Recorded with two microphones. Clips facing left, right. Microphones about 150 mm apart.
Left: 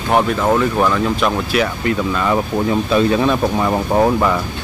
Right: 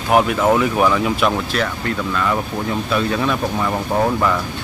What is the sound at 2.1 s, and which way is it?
Speech, 20° left (ahead or behind).